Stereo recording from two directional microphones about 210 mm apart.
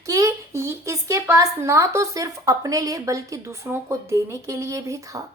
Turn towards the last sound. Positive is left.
turn(degrees=-15)  # may be behind; listen again after turning